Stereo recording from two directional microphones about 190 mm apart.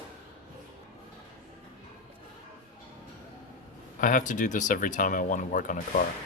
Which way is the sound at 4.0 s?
45° left (ahead or behind).